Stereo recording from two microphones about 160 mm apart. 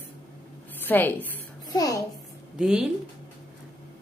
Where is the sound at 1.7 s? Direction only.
20° left (ahead or behind).